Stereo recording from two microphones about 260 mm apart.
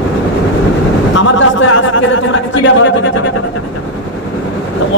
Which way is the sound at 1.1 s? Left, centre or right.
Left.